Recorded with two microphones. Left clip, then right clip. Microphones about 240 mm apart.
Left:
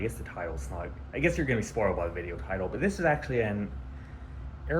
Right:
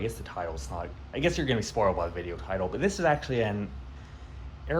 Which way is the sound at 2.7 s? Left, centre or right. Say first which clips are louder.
Right 1 dB; right.